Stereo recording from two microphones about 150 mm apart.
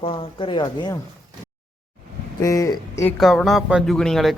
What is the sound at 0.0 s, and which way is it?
Speech, 35° left (ahead or behind).